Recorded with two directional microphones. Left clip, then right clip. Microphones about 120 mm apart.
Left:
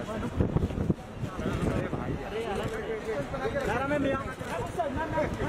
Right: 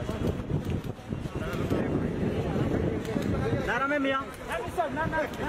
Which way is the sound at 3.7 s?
30° right (ahead or behind).